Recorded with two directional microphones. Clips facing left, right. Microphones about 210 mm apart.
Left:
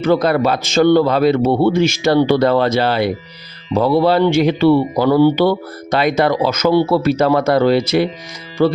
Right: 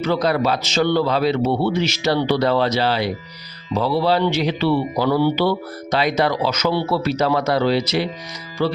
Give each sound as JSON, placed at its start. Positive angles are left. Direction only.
{"t": 0.0, "sound": "speech", "side_deg": 50}